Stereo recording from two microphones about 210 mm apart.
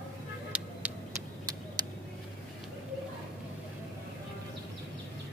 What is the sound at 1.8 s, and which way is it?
Vehicle, 20° right (ahead or behind).